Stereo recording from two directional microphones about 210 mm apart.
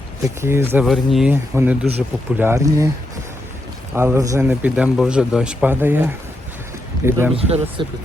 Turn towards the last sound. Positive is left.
turn(degrees=-25)  # may be behind; listen again after turning